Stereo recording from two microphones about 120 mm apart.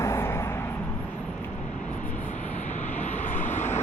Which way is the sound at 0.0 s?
25° left (ahead or behind).